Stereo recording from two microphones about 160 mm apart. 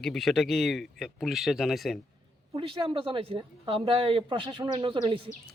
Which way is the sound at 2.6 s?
35° right (ahead or behind).